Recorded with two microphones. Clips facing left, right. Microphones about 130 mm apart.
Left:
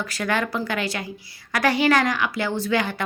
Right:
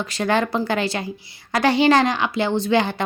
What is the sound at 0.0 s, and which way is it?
A woman's voice, 25° right (ahead or behind).